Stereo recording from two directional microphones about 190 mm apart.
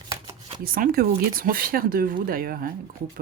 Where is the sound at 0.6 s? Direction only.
50° right (ahead or behind).